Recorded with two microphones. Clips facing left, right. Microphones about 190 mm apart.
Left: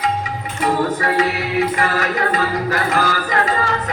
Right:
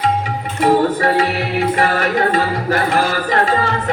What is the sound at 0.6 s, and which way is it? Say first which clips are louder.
Music: right 5 dB; 30° right (ahead or behind).